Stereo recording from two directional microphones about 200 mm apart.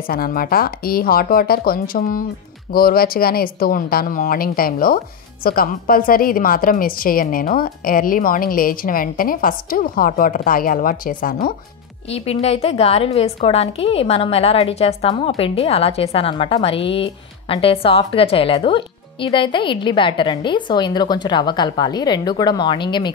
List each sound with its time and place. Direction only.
0.0 s speech: 50° left (ahead or behind)
12.1 s a woman's voice: 30° left (ahead or behind)